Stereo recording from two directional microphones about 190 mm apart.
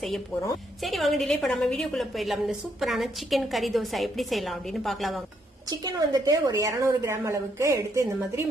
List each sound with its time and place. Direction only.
0.8 s a woman's voice: centre (ahead or behind)
5.6 s a woman's voice: 20° right (ahead or behind)